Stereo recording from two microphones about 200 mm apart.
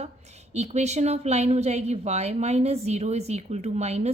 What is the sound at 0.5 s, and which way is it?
A woman's voice, 35° right (ahead or behind).